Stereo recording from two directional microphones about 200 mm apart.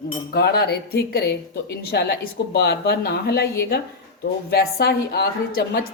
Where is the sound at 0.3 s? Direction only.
55° left (ahead or behind).